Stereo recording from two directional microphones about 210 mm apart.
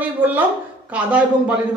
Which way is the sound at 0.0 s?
10° right (ahead or behind).